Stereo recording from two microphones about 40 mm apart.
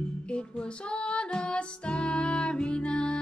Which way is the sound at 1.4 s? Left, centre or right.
Left.